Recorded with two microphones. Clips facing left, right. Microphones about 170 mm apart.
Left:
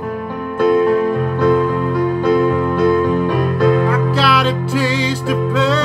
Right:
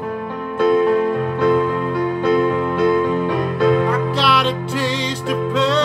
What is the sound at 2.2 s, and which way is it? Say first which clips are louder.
Music: left 1 dB; 25° right (ahead or behind).